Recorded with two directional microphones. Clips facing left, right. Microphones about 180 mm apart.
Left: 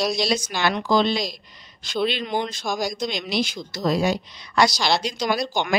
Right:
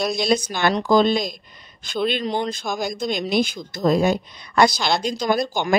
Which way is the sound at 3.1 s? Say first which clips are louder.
Right 4 dB; 50° right (ahead or behind).